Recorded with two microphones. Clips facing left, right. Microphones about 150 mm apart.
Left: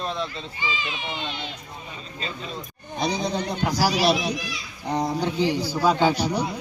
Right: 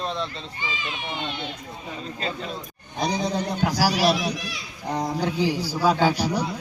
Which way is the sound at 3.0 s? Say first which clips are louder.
Right 1 dB; 10° right (ahead or behind).